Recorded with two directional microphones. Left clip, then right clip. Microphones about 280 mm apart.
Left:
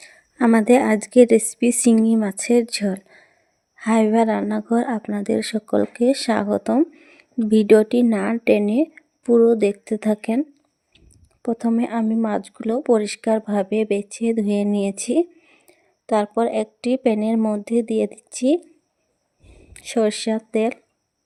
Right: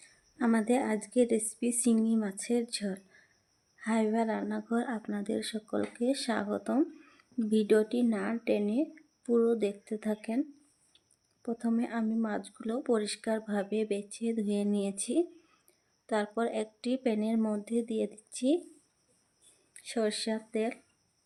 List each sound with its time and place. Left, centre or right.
0.0 s a woman's voice: left
11.4 s speech: left
19.7 s speech: left